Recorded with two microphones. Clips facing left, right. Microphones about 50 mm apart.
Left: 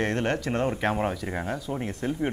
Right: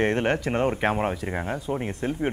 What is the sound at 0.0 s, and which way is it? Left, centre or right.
Speech, right.